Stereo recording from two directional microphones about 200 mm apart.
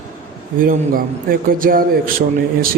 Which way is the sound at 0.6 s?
45° right (ahead or behind).